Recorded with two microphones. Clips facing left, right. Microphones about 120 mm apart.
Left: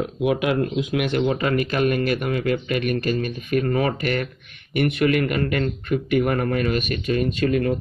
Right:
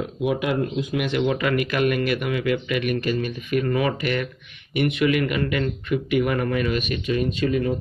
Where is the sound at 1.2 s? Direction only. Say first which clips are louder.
Even; 35° left (ahead or behind).